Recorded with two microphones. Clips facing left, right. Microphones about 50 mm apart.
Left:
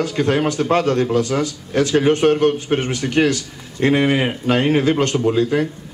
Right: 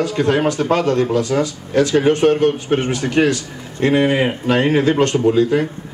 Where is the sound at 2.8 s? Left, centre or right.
Right.